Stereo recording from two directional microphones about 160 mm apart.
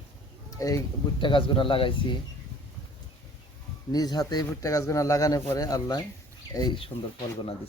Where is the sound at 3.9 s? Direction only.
25° left (ahead or behind).